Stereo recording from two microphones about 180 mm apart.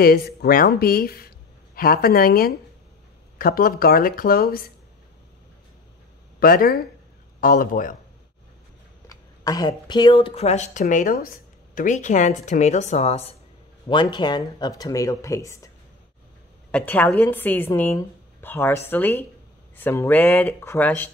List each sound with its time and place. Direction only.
0.0 s speech: 60° left (ahead or behind)
6.4 s a man's voice: 55° left (ahead or behind)
9.1 s speech: 20° left (ahead or behind)
14.1 s speech: 25° left (ahead or behind)
16.7 s a woman's voice: 10° left (ahead or behind)